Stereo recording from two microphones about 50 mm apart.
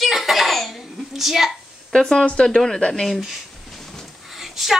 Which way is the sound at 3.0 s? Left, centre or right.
Centre.